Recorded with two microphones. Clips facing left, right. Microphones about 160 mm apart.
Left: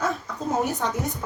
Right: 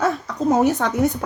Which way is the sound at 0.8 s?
80° right.